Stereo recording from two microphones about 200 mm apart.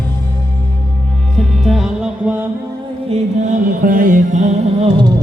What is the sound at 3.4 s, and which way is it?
Music, 40° right (ahead or behind).